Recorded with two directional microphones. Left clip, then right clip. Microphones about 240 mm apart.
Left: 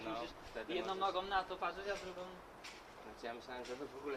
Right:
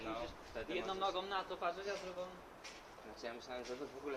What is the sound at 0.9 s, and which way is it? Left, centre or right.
Speech, left.